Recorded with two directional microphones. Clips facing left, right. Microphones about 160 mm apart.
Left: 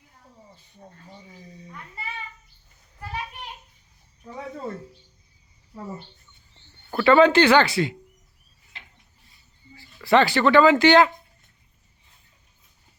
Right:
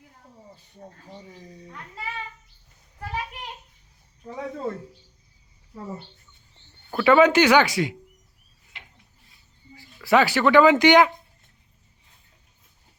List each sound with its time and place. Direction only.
6.9 s speech: 10° right (ahead or behind)
9.7 s speech: 10° right (ahead or behind)